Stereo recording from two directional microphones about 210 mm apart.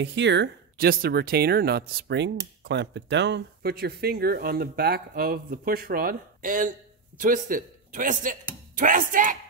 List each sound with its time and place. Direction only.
0.0 s a man's voice: 55° right (ahead or behind); by 9.4 s 40° right (ahead or behind)